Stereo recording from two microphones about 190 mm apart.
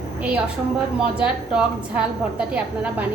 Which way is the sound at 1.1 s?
5° right (ahead or behind).